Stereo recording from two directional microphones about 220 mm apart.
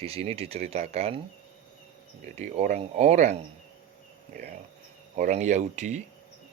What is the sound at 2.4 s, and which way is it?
Speech, 30° right (ahead or behind).